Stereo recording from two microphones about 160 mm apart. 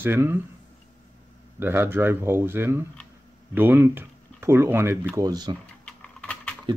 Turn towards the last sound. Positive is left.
turn(degrees=5)  # may be behind; listen again after turning